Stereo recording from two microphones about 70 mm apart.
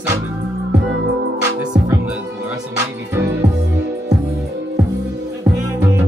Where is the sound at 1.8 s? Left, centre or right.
Right.